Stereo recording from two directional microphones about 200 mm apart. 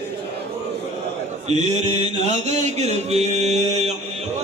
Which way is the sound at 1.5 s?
35° right (ahead or behind).